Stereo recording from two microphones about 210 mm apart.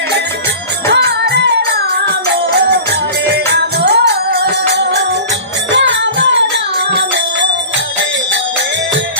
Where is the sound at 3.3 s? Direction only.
50° right (ahead or behind).